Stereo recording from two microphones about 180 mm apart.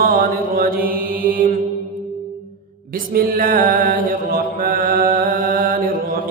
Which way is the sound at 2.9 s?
50° right (ahead or behind).